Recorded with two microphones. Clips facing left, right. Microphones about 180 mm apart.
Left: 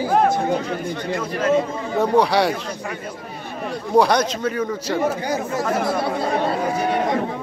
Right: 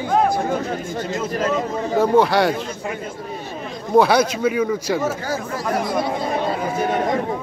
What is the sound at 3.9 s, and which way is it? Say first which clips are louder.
A man's voice: right 2 dB; 5° right (ahead or behind).